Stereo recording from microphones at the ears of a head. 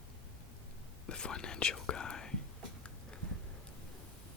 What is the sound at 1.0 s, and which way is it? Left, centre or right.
Whispering, left.